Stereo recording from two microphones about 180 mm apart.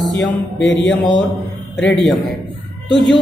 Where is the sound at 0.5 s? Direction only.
80° left.